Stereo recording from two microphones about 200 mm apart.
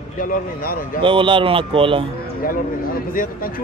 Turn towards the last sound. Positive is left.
turn(degrees=45)  # may be behind; listen again after turning